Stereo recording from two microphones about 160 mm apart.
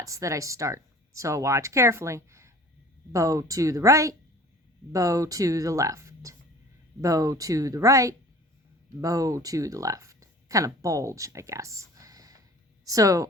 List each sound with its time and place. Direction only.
0.0 s speech: 20° right (ahead or behind)